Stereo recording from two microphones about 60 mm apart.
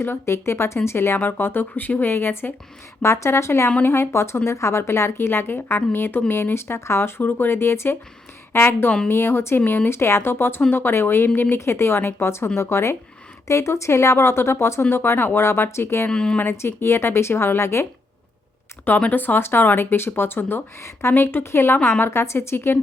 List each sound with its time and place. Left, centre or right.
0.0 s a woman's voice: left
3.0 s a woman's voice: left
7.2 s a woman's voice: left
9.6 s speech: left
9.9 s a woman's voice: left
16.0 s speech: centre
16.4 s a woman's voice: left
18.9 s a woman's voice: left